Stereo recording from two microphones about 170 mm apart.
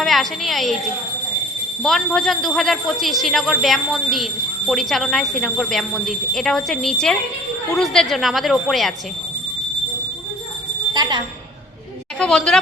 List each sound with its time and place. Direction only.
0.0 s speech: centre (ahead or behind)
1.8 s speech: centre (ahead or behind)
10.9 s a sound: 25° right (ahead or behind)
12.2 s speech: 5° left (ahead or behind)